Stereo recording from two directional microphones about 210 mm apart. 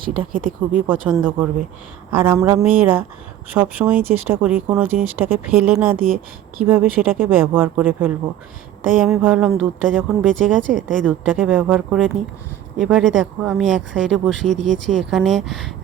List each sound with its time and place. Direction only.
0.3 s speech: 40° right (ahead or behind)
0.9 s speech: 5° right (ahead or behind)